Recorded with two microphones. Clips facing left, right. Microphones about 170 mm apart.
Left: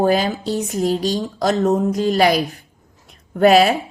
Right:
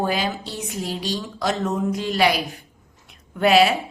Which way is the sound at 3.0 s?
45° left (ahead or behind).